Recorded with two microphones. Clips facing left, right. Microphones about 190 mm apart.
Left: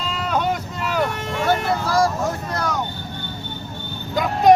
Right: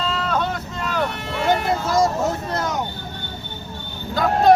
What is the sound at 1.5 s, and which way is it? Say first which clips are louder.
Music: right 1 dB; 20° right (ahead or behind).